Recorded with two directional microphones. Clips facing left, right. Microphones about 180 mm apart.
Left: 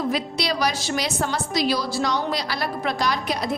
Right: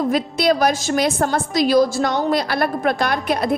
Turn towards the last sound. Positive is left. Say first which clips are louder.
# right 5 dB
turn(degrees=-55)  # may be behind; listen again after turning